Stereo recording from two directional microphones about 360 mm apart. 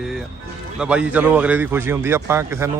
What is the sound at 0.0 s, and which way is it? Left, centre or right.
A man's voice, centre.